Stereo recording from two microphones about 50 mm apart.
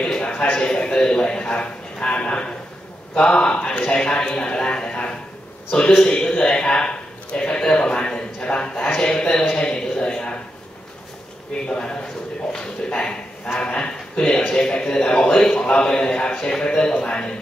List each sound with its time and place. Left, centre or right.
0.0 s a sound: centre
1.1 s a man's voice: centre
11.6 s a man's voice: centre